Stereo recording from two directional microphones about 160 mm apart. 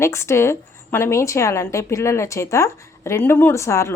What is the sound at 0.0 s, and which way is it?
A woman's voice, 15° left (ahead or behind).